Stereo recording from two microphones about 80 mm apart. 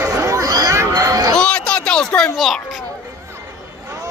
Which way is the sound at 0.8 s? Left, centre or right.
Right.